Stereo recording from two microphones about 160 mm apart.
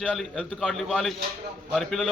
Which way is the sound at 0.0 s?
5° left (ahead or behind).